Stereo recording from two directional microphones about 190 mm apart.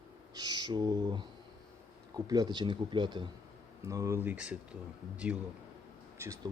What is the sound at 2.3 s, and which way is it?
Speech, 20° right (ahead or behind).